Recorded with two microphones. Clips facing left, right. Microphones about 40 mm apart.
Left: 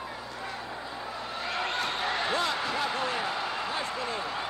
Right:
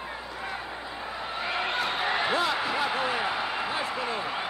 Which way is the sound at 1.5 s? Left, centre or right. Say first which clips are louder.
Right 2 dB; centre.